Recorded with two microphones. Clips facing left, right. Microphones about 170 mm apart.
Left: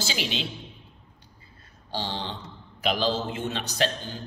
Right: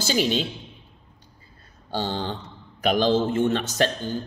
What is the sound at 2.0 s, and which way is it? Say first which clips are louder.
A man's voice: right 5 dB; 45° right (ahead or behind).